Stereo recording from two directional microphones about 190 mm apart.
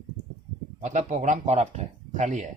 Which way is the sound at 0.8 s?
40° right (ahead or behind).